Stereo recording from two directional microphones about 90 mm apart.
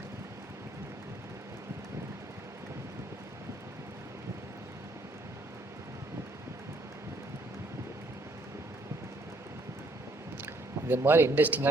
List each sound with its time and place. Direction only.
10.4 s speech: 25° right (ahead or behind)